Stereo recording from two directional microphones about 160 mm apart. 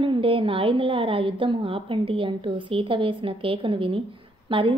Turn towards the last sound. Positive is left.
turn(degrees=-30)  # may be behind; listen again after turning